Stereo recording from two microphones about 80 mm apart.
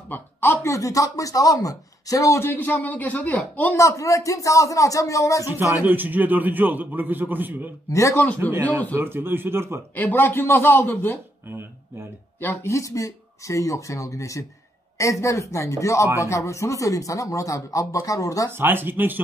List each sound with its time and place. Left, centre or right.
0.1 s speech: left
2.4 s a man's voice: left
3.7 s speech: left
5.9 s a man's voice: right
7.9 s speech: left
8.4 s a man's voice: right
9.9 s a man's voice: left
12.4 s speech: left
18.6 s a man's voice: right